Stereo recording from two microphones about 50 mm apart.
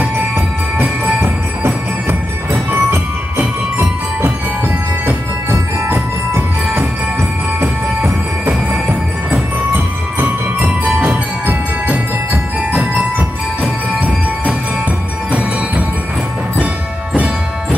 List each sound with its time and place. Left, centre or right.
0.7 s music: right
2.0 s music: right
5.0 s music: right
10.1 s music: right
13.9 s music: right